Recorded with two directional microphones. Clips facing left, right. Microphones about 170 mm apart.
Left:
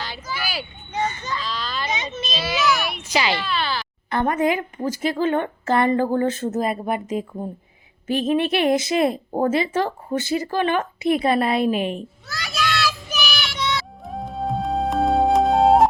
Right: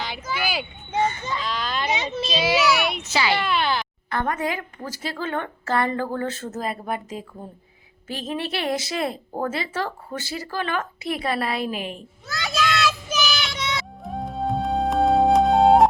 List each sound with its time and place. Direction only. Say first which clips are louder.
0.0 s a sound: right 2 dB; 15° right (ahead or behind)
3.0 s a woman's voice: even; 15° left (ahead or behind)
12.3 s children playing: right 2 dB; 20° right (ahead or behind)
14.0 s music: even; centre (ahead or behind)